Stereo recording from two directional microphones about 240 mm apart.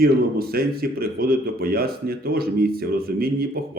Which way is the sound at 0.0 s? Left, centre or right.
Right.